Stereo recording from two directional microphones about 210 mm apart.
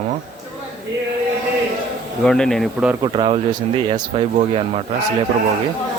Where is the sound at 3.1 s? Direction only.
25° right (ahead or behind).